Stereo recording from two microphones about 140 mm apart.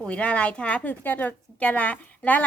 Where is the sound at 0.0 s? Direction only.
10° left (ahead or behind).